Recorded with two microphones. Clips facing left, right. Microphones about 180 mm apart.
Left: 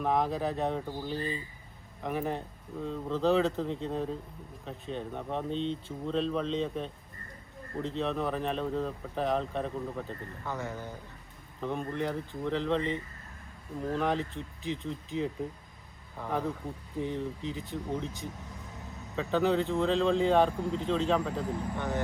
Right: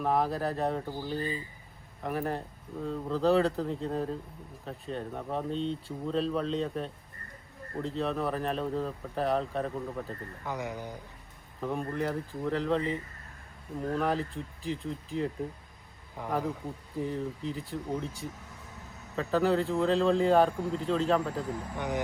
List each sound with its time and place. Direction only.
0.0 s speech: centre (ahead or behind)
10.4 s speech: 15° right (ahead or behind)
11.6 s speech: centre (ahead or behind)
16.1 s speech: 10° right (ahead or behind)
19.1 s speech: centre (ahead or behind)
21.8 s speech: 15° right (ahead or behind)